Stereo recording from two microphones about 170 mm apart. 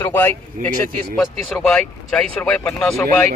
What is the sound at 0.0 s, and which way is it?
Speech, 10° left (ahead or behind).